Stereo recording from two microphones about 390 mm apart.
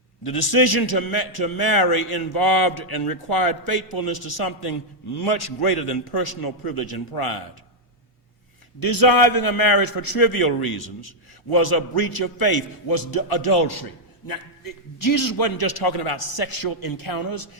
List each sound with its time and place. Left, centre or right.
0.2 s a man's voice: left
8.8 s a man's voice: left
14.3 s a man's voice: left